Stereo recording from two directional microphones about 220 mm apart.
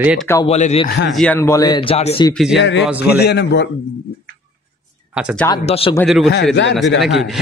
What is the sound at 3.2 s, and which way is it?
Speech, 50° left (ahead or behind).